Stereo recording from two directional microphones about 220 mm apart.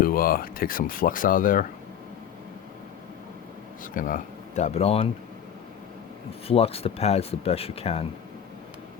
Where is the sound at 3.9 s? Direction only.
40° left (ahead or behind).